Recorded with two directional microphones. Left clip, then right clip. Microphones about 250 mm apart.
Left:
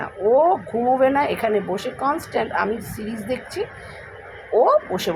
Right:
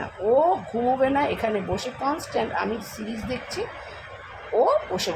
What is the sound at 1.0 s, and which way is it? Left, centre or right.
A woman's voice, centre.